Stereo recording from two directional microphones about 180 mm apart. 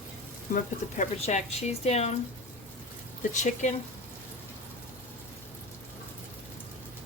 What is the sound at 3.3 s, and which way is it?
Speech, 40° left (ahead or behind).